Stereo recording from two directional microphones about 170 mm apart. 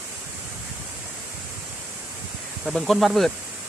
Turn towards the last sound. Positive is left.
turn(degrees=0)  # may be behind; listen again after turning